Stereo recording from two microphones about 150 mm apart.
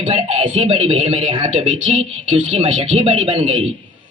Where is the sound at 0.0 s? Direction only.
50° right (ahead or behind).